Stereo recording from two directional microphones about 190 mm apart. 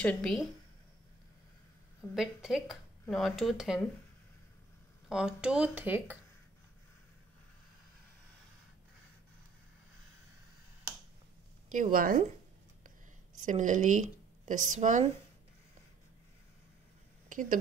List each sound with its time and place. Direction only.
0.0 s speech: 5° left (ahead or behind)
2.1 s speech: centre (ahead or behind)
5.1 s speech: 5° right (ahead or behind)
11.7 s speech: 45° right (ahead or behind)
13.4 s speech: 40° right (ahead or behind)
17.3 s a sound: 45° right (ahead or behind)